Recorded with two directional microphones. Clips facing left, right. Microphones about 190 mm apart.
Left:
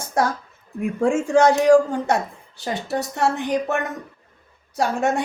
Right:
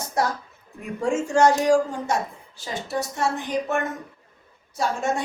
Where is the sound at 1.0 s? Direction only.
60° left (ahead or behind).